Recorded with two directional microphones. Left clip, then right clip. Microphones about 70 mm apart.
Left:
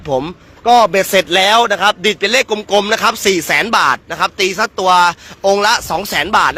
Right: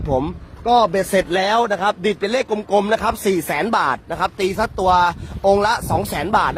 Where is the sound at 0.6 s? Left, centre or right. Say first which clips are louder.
Left 6 dB; centre.